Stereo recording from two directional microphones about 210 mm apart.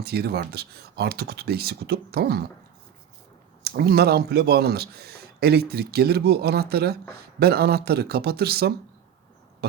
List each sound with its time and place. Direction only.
0.0 s a man's voice: 50° right (ahead or behind)
3.6 s a man's voice: 50° right (ahead or behind)